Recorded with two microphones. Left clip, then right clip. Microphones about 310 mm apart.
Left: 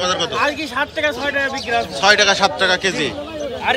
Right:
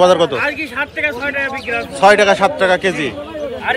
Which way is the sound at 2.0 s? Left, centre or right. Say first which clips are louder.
Right 4 dB; centre.